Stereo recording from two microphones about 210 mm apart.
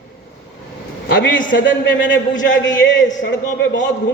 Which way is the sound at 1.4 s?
40° left (ahead or behind).